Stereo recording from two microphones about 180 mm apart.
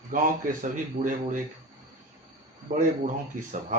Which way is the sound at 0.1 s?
50° right (ahead or behind).